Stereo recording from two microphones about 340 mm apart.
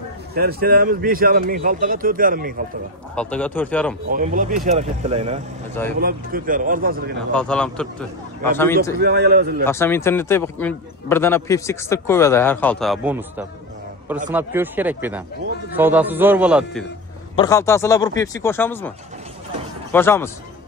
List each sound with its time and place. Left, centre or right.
0.3 s speech: right
3.2 s a man's voice: centre
4.1 s speech: right
7.3 s a man's voice: centre
9.0 s speech: right
9.7 s a man's voice: centre
17.4 s a man's voice: centre